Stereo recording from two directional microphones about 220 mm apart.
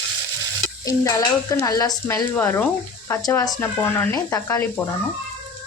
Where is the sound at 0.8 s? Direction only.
15° left (ahead or behind).